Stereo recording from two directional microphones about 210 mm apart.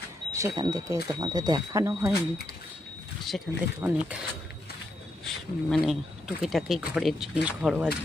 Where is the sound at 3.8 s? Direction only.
10° right (ahead or behind).